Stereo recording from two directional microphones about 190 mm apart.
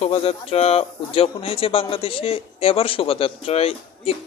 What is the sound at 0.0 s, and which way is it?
A man's voice, 30° left (ahead or behind).